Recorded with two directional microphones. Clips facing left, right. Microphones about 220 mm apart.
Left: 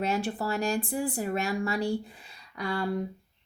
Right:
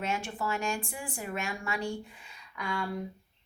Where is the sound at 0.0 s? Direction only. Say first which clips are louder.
Left 5 dB; 35° left (ahead or behind).